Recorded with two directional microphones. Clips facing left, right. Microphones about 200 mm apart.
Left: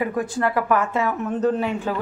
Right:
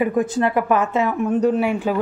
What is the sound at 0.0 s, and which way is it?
A woman's voice, 20° right (ahead or behind).